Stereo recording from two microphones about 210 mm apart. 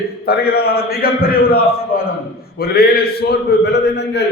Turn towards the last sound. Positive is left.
turn(degrees=55)  # may be behind; listen again after turning